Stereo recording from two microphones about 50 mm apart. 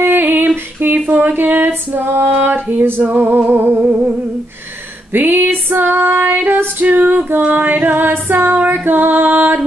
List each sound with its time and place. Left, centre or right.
0.0 s female singing: right
5.1 s female singing: right
7.2 s music: right